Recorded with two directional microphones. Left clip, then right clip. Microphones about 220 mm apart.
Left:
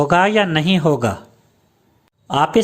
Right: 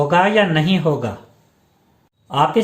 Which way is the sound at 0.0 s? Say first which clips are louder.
Even; 45° left (ahead or behind).